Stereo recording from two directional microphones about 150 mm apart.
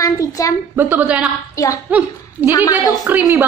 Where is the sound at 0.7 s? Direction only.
15° right (ahead or behind).